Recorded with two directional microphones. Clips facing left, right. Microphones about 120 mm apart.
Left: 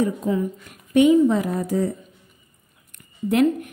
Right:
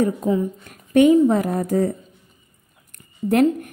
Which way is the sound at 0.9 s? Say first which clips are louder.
Right 2 dB; 45° right (ahead or behind).